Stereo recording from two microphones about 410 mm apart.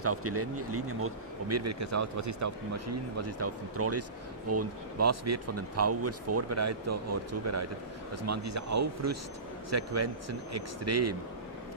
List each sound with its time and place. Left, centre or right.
0.0 s speech: right